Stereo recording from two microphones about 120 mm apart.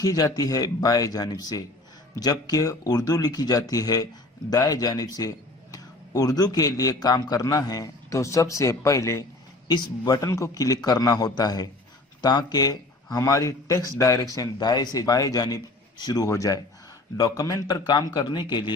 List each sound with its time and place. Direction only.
0.0 s a man's voice: 30° left (ahead or behind)